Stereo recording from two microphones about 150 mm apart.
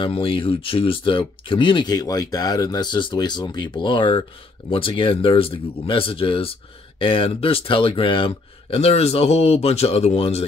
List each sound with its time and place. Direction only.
0.0 s speech: 35° left (ahead or behind)